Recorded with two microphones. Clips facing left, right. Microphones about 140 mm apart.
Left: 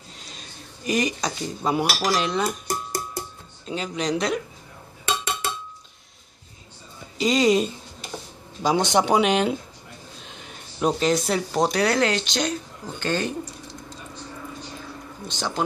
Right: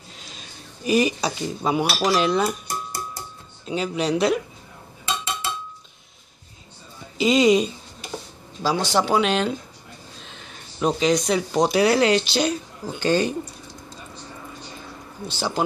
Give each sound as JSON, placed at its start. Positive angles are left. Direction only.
{"t": 0.8, "sound": "speech", "side_deg": -10}
{"t": 3.6, "sound": "speech", "side_deg": -10}
{"t": 5.0, "sound": "a sound", "side_deg": 65}
{"t": 7.2, "sound": "speech", "side_deg": -5}
{"t": 8.6, "sound": "speech", "side_deg": 20}
{"t": 11.8, "sound": "speech", "side_deg": -10}
{"t": 15.2, "sound": "speech", "side_deg": -5}